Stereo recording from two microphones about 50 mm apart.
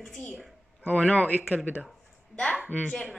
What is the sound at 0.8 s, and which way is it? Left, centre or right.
Speech, left.